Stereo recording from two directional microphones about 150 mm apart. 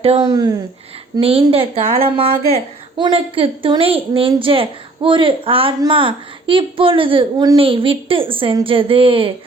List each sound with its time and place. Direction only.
0.2 s speech: 25° right (ahead or behind)
1.2 s a woman's voice: 40° right (ahead or behind)